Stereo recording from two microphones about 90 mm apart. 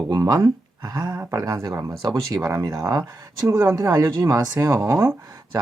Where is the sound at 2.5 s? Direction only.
35° right (ahead or behind).